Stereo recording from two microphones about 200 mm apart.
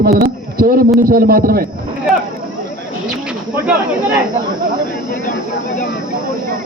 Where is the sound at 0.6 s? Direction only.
45° right (ahead or behind).